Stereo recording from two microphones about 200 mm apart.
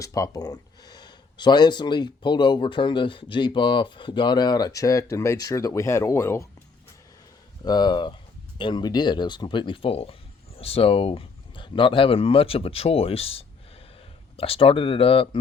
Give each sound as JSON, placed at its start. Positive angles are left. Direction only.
{"t": 0.0, "sound": "speech", "side_deg": 15}
{"t": 7.6, "sound": "speech", "side_deg": 20}